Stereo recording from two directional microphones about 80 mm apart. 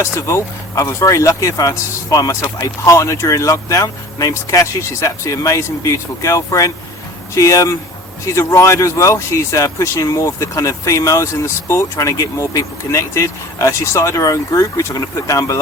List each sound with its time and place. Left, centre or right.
0.0 s speech: left